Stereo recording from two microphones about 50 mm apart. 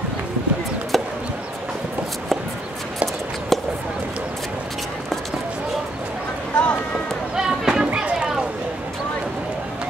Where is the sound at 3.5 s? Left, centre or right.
Centre.